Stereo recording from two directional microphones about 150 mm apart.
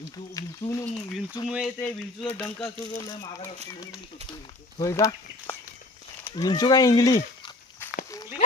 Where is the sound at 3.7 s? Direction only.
20° left (ahead or behind).